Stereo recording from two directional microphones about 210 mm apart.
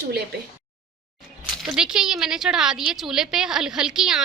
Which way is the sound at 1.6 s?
5° right (ahead or behind).